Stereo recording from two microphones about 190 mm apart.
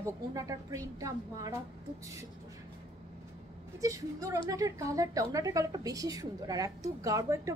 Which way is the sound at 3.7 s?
15° right (ahead or behind).